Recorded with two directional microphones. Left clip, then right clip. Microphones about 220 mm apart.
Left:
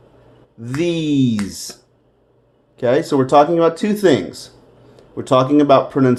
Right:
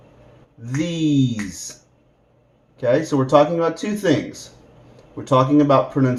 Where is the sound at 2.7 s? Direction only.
45° left (ahead or behind).